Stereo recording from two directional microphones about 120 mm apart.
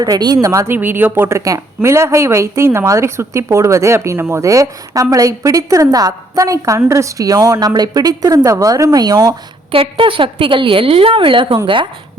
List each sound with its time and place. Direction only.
0.0 s a woman's voice: 35° right (ahead or behind)
0.8 s speech: 15° right (ahead or behind)
1.4 s a woman's voice: 25° right (ahead or behind)
9.7 s a woman's voice: 50° right (ahead or behind)